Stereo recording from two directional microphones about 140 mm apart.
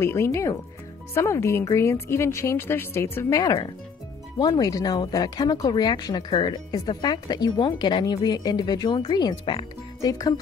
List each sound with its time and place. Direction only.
0.0 s speech: 20° left (ahead or behind)